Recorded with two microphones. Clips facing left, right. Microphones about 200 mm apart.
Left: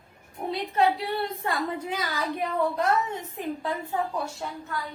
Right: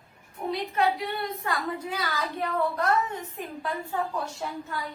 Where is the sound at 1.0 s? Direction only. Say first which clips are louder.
Left 2 dB; 30° left (ahead or behind).